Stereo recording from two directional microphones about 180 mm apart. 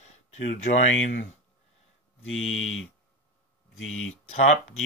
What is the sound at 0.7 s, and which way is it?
Speech, 40° left (ahead or behind).